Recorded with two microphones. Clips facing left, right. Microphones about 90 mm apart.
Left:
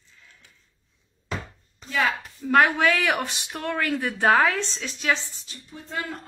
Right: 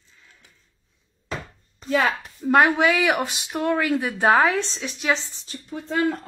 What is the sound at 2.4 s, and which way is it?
Speech, 20° right (ahead or behind).